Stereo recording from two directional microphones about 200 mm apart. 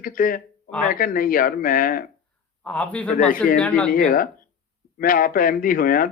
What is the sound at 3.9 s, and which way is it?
A man's voice, 45° left (ahead or behind).